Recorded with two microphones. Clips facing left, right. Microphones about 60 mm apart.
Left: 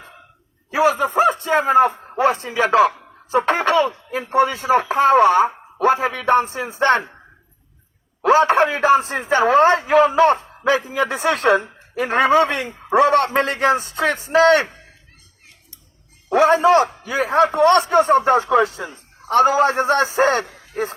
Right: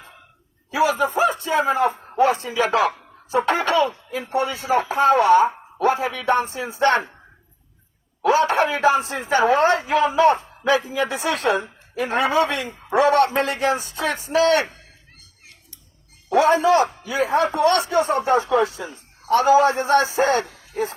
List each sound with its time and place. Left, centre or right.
0.7 s a sound: left
2.1 s speech: left
8.2 s speech: left
16.6 s speech: left
18.4 s a man's voice: left